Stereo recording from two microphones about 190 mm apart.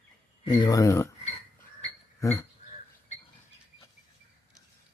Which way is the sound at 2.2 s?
15° left (ahead or behind).